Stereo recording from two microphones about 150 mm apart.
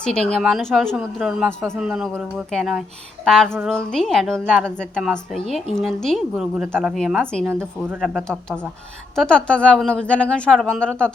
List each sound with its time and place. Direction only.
0.0 s a woman's voice: 5° left (ahead or behind)
7.4 s speech: 15° right (ahead or behind)
8.1 s a woman's voice: 5° left (ahead or behind)